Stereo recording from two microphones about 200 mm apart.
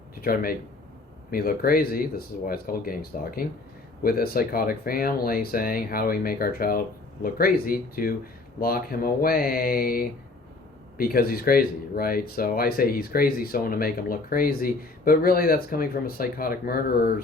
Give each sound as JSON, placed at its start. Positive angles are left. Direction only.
{"t": 0.2, "sound": "speech", "side_deg": 45}